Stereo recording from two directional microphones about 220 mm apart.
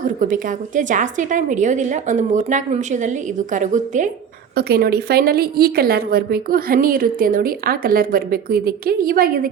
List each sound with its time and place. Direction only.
0.0 s a woman's voice: 35° right (ahead or behind)
4.5 s a woman's voice: 45° right (ahead or behind)